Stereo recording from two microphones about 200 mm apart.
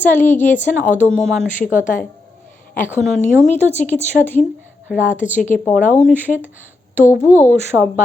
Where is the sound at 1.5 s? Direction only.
40° left (ahead or behind).